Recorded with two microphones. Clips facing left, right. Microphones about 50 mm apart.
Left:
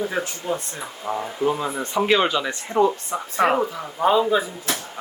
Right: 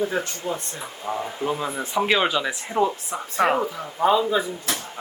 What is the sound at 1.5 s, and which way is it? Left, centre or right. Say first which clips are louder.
Speech: left 4 dB; centre.